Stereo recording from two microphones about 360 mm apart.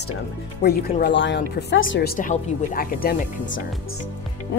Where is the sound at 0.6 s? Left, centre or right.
Left.